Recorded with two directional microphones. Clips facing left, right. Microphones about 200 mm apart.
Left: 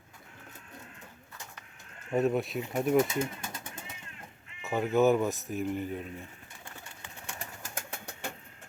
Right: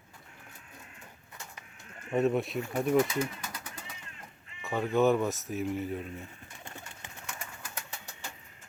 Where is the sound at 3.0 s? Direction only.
25° left (ahead or behind).